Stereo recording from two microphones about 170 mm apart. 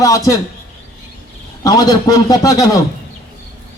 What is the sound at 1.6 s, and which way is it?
A man's voice, 20° left (ahead or behind).